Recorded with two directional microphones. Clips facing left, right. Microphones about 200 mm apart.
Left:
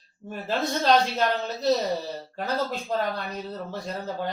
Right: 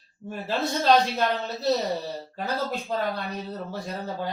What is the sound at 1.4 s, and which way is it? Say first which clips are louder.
Speech: left 1 dB; centre (ahead or behind).